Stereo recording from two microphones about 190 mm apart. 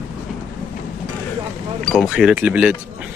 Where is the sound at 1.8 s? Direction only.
Centre (ahead or behind).